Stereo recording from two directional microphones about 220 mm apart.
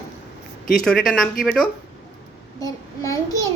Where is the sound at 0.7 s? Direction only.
Centre (ahead or behind).